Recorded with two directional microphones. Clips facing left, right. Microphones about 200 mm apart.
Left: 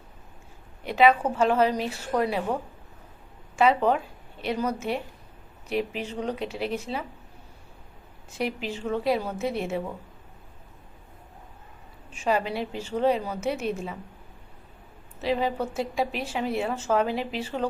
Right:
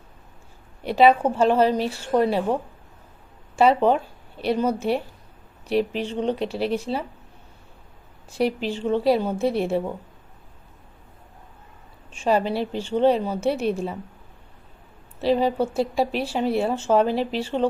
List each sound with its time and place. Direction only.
0.9 s a woman's voice: 30° right (ahead or behind)
3.5 s a woman's voice: 30° right (ahead or behind)
8.3 s a woman's voice: 35° right (ahead or behind)
12.1 s a woman's voice: 30° right (ahead or behind)
15.2 s a woman's voice: 35° right (ahead or behind)